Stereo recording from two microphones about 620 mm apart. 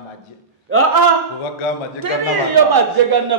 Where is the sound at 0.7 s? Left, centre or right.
Centre.